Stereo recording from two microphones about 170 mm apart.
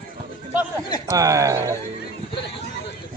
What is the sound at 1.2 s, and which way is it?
Speech, 20° right (ahead or behind).